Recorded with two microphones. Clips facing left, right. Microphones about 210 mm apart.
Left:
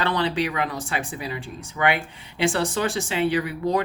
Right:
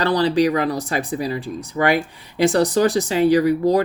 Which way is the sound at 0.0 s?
35° right (ahead or behind).